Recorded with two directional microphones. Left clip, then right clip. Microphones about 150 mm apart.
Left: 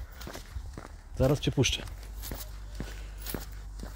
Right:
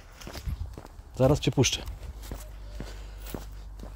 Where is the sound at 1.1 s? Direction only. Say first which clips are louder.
Right 4 dB; 40° right (ahead or behind).